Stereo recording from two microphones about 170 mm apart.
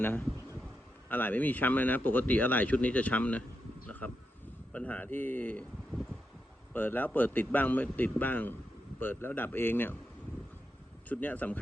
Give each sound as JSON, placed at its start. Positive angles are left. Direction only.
{"t": 0.0, "sound": "speech", "side_deg": 10}
{"t": 3.8, "sound": "a sound", "side_deg": 10}
{"t": 4.7, "sound": "speech", "side_deg": 10}
{"t": 11.1, "sound": "speech", "side_deg": 10}